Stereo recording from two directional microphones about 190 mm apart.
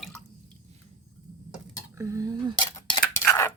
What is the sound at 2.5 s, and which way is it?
Dishes, 25° left (ahead or behind).